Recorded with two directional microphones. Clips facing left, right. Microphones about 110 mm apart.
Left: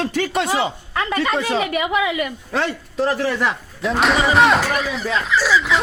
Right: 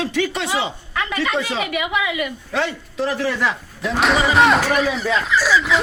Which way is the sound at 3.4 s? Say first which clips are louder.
Left 1 dB; centre (ahead or behind).